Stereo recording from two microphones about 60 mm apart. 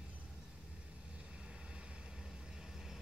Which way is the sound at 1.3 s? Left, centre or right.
Centre.